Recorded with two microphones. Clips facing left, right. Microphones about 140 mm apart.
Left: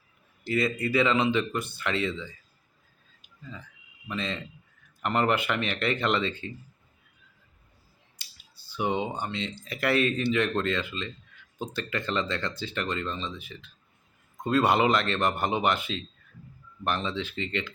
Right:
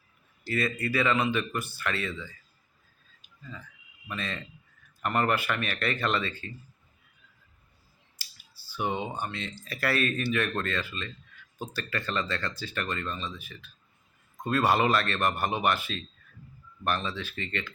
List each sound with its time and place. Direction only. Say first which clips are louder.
0.4 s speech: left 3 dB; 20° left (ahead or behind)
4.1 s speech: left 3 dB; 20° left (ahead or behind)
8.2 s a sound: right 3 dB; 20° left (ahead or behind)
9.2 s speech: left 3 dB; 20° left (ahead or behind)